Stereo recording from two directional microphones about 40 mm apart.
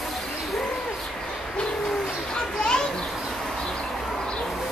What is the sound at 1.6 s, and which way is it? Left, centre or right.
Bird, left.